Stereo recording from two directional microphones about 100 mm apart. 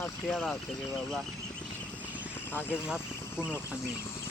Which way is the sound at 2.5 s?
20° left (ahead or behind).